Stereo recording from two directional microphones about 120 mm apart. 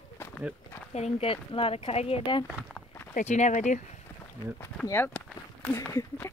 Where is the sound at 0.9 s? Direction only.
65° left (ahead or behind).